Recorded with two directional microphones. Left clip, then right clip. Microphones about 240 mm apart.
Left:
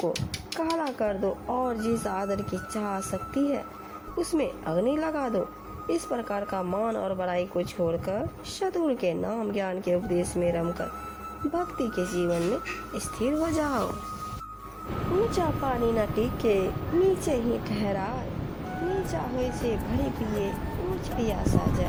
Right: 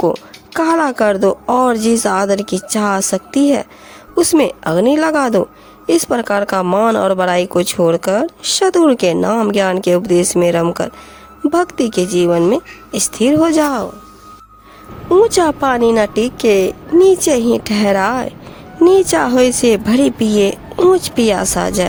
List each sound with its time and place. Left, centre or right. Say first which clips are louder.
0.5 s speech: right 15 dB; right
15.3 s speech: right 14 dB; right
21.0 s speech: right 15 dB; right